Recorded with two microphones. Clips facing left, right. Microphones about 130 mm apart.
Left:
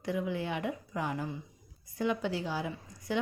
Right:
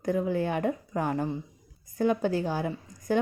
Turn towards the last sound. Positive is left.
turn(degrees=-45)  # may be behind; listen again after turning